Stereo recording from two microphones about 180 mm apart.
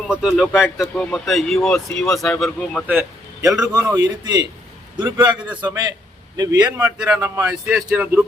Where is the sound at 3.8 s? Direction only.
15° right (ahead or behind).